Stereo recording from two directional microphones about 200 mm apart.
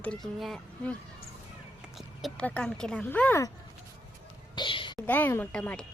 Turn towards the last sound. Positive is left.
turn(degrees=5)  # may be behind; listen again after turning